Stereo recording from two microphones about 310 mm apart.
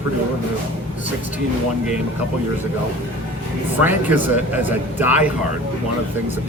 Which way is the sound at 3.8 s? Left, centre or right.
Centre.